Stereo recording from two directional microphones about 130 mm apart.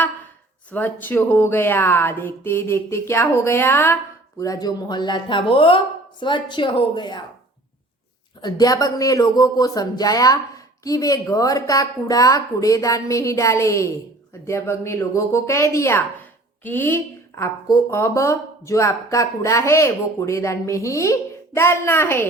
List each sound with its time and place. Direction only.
0.7 s speech: 15° left (ahead or behind); by 7.2 s 35° left (ahead or behind)
8.4 s a woman's voice: 30° left (ahead or behind)